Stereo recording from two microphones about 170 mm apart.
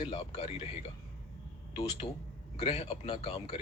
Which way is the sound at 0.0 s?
40° left (ahead or behind).